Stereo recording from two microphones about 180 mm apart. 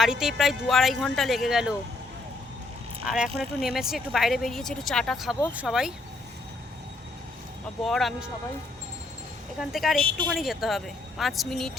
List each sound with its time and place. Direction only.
0.0 s speech: 5° right (ahead or behind)
3.1 s speech: centre (ahead or behind)
7.9 s speech: centre (ahead or behind)
9.6 s speech: centre (ahead or behind)
10.0 s a woman's voice: 30° right (ahead or behind)
10.2 s speech: centre (ahead or behind)